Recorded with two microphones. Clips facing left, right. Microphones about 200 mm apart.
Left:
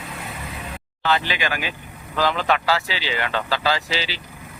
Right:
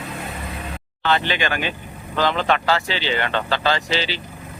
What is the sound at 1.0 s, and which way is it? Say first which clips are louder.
Speech: right 2 dB; 5° left (ahead or behind).